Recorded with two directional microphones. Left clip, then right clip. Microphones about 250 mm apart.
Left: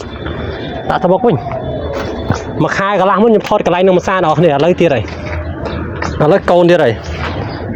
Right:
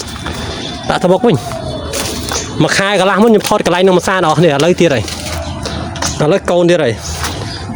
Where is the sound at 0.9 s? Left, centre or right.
Right.